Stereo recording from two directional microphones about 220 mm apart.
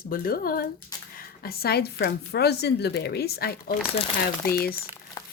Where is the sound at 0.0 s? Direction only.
40° left (ahead or behind).